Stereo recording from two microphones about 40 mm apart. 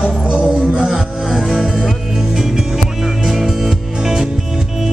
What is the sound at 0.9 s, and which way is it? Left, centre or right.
Music, centre.